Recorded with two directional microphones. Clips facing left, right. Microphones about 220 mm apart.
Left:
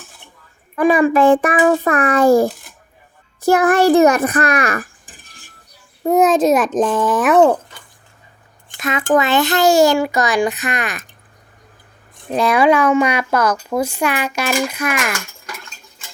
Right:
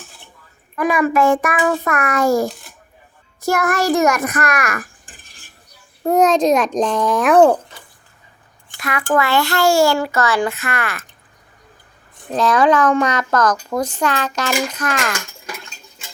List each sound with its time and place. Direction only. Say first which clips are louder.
0.8 s a child's voice: left 4 dB; 30° left (ahead or behind)
6.1 s a child's voice: left 1 dB; 5° left (ahead or behind)
8.8 s a child's voice: left 3 dB; 20° left (ahead or behind)
12.3 s speech: left 1 dB; 10° left (ahead or behind)